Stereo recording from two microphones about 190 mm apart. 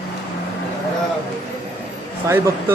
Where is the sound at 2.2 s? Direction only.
10° right (ahead or behind).